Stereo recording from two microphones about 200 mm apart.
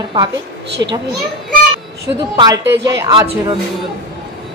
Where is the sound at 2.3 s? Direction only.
20° right (ahead or behind).